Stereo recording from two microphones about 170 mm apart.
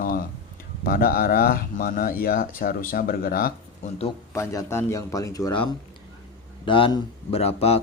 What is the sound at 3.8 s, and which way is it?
Speech, 40° left (ahead or behind).